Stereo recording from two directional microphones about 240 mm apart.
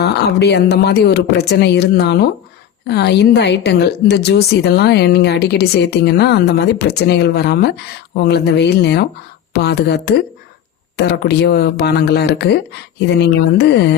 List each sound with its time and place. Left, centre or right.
0.0 s a woman's voice: left